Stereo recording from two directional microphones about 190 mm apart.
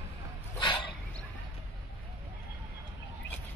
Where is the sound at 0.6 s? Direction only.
25° left (ahead or behind).